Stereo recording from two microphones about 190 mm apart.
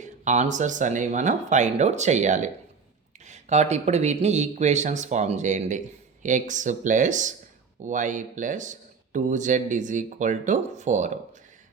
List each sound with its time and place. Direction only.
0.0 s speech: 40° right (ahead or behind)